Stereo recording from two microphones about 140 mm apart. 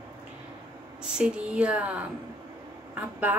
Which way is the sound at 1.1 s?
5° right (ahead or behind).